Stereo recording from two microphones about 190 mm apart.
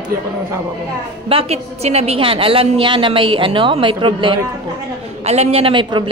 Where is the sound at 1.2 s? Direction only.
30° right (ahead or behind).